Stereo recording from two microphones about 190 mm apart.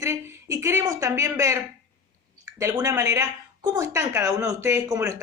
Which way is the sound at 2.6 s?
15° right (ahead or behind).